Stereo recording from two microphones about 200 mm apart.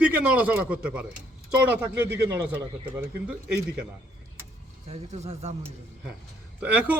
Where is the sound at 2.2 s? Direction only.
10° right (ahead or behind).